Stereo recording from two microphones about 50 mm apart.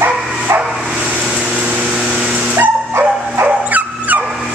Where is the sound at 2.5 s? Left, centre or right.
Right.